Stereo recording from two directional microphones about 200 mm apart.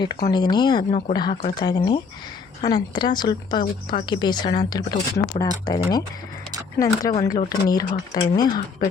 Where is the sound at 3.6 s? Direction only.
45° left (ahead or behind).